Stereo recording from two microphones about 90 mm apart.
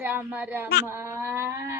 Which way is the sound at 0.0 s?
25° right (ahead or behind).